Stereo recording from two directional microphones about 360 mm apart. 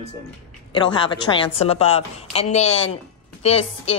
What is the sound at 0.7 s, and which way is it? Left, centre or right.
A woman's voice, centre.